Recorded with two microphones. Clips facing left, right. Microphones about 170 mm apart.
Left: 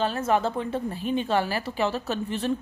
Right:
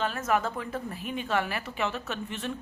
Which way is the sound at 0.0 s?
30° left (ahead or behind).